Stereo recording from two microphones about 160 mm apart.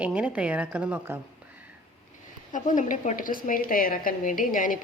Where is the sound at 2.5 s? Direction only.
50° left (ahead or behind).